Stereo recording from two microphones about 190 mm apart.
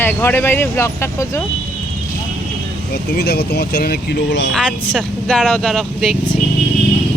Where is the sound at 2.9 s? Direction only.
55° left (ahead or behind); by 4.5 s 75° left (ahead or behind).